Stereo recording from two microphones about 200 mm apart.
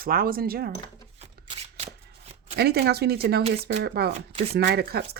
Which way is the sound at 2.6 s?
55° right (ahead or behind).